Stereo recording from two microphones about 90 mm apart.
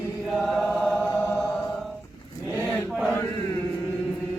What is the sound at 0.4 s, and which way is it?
Chant, 5° left (ahead or behind).